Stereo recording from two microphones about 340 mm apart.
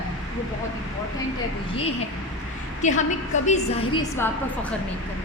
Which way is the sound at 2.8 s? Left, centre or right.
Left.